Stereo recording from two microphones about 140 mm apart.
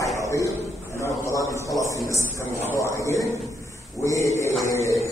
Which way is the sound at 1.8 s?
25° right (ahead or behind).